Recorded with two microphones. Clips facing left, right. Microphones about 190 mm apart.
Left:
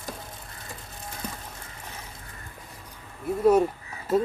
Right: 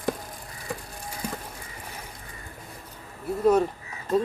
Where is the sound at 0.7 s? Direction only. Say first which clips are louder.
Right 10 dB; 65° right (ahead or behind).